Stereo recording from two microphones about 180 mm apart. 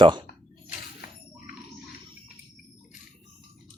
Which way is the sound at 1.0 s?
60° left (ahead or behind).